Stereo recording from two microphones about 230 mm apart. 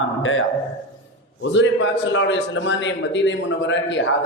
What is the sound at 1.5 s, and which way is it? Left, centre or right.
A man's voice, left.